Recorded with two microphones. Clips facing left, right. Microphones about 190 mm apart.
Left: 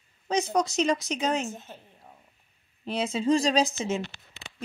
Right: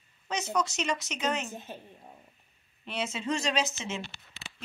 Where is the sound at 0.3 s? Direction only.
35° left (ahead or behind).